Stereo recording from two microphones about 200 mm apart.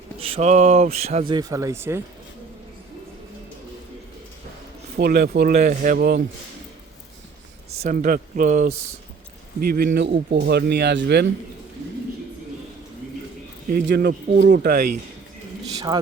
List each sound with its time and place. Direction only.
0.2 s mantra: 30° right (ahead or behind)
1.3 s speech: 20° right (ahead or behind)
4.9 s speech: 50° right (ahead or behind)
7.7 s mantra: 35° right (ahead or behind)
9.6 s speech: 50° right (ahead or behind)
13.7 s speech: 45° right (ahead or behind)
15.9 s a man's voice: 20° right (ahead or behind)